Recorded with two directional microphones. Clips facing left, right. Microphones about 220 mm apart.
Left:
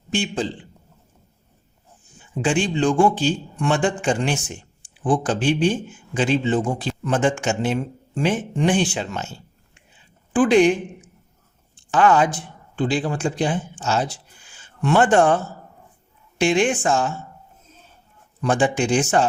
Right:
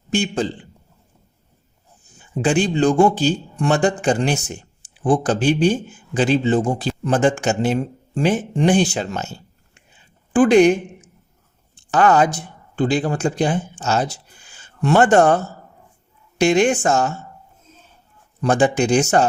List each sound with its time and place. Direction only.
0.1 s speech: 45° right (ahead or behind)
2.4 s a man's voice: 40° right (ahead or behind)
10.3 s speech: 45° right (ahead or behind)
11.9 s speech: 40° right (ahead or behind)
16.4 s a man's voice: 40° right (ahead or behind)
18.4 s a man's voice: 40° right (ahead or behind)